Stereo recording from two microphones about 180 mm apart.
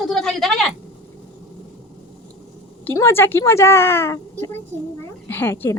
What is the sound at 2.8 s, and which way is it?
Speech, 15° left (ahead or behind).